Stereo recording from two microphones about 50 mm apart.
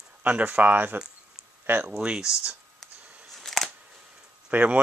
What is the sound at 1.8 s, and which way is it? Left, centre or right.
Speech, centre.